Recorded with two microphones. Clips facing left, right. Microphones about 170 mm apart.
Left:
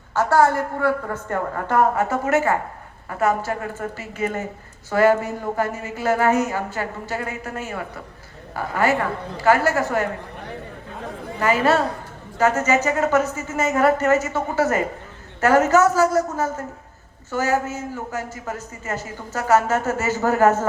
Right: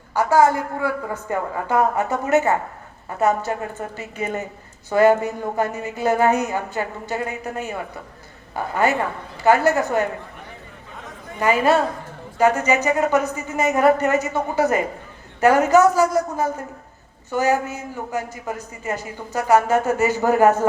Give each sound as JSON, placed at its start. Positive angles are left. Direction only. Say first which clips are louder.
{"t": 0.1, "sound": "a man's voice", "louder": "right 1 dB", "side_deg": -15}
{"t": 2.0, "sound": "speech", "louder": "right 1 dB", "side_deg": -20}
{"t": 11.3, "sound": "a man's voice", "louder": "right 1 dB", "side_deg": -15}